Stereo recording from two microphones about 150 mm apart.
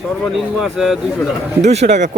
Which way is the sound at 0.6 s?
Centre (ahead or behind).